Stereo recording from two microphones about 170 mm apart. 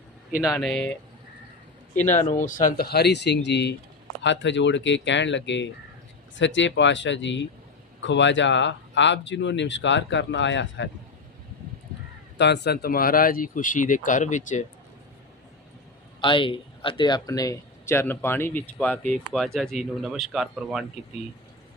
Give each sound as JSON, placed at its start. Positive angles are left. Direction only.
{"t": 0.3, "sound": "speech", "side_deg": -5}
{"t": 2.0, "sound": "a man's voice", "side_deg": 15}
{"t": 2.2, "sound": "speech", "side_deg": 45}
{"t": 12.4, "sound": "speech", "side_deg": 80}
{"t": 16.2, "sound": "a man's voice", "side_deg": 30}